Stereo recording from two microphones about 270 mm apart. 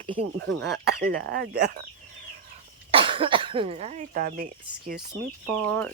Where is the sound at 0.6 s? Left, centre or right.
Right.